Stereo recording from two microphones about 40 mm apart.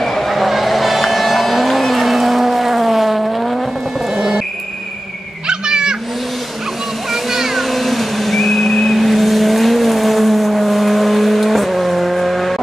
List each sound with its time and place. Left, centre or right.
0.0 s vehicle: centre
4.1 s music: centre
5.5 s cat: right
7.1 s vehicle: centre